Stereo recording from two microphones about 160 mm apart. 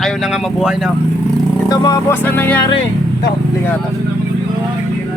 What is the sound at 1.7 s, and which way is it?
Speech, 20° left (ahead or behind).